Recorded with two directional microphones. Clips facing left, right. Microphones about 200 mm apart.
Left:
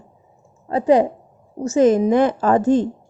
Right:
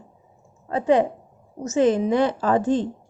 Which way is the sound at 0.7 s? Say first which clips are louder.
Left 4 dB; 35° left (ahead or behind).